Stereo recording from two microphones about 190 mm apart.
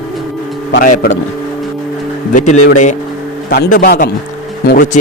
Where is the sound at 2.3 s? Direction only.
40° left (ahead or behind).